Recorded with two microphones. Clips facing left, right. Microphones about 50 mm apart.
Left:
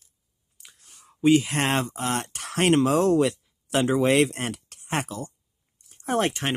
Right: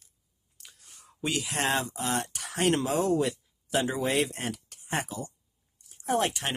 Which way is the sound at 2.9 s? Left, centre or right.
Left.